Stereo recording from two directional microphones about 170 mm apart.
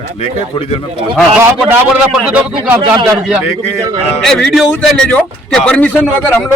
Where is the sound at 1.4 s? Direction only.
10° right (ahead or behind).